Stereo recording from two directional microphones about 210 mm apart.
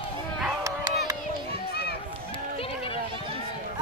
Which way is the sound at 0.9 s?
15° right (ahead or behind).